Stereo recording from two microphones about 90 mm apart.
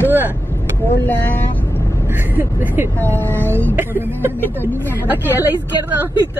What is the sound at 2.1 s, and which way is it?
Speech, 20° right (ahead or behind).